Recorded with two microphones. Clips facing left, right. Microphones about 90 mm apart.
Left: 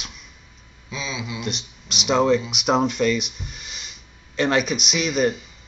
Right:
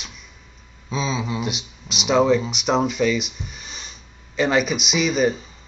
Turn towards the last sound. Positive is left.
turn(degrees=0)  # may be behind; listen again after turning